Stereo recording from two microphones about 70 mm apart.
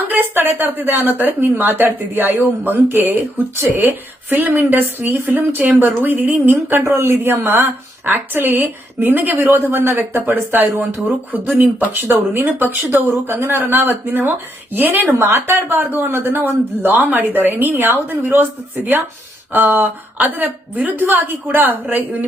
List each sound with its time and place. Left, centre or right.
0.0 s speech: right
19.5 s speech: right